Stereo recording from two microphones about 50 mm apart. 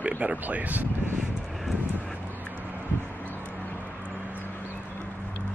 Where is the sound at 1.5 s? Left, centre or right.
Centre.